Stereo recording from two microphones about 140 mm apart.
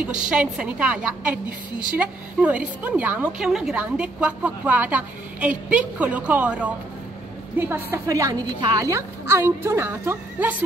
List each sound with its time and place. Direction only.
0.0 s a woman's voice: 10° right (ahead or behind)